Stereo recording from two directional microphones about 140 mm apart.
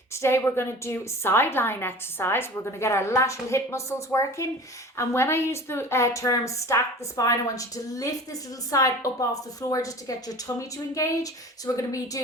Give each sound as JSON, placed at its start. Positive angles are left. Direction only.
{"t": 0.1, "sound": "a woman's voice", "side_deg": 20}